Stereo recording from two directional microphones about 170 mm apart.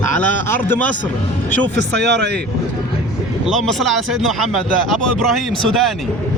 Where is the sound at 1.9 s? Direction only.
80° right.